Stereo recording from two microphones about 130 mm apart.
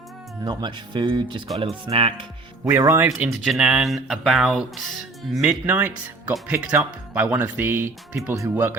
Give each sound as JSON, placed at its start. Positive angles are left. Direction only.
{"t": 0.4, "sound": "speech", "side_deg": -35}
{"t": 1.5, "sound": "speech", "side_deg": -50}
{"t": 2.6, "sound": "speech", "side_deg": -20}
{"t": 3.4, "sound": "speech", "side_deg": -5}